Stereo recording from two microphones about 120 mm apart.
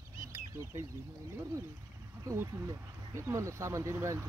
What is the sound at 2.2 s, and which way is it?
Speech, 25° right (ahead or behind).